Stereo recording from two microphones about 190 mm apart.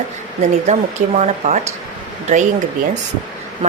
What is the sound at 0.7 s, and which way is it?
Speech, 35° right (ahead or behind).